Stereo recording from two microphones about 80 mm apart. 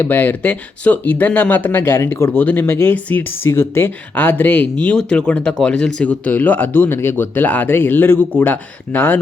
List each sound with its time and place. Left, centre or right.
0.0 s speech: left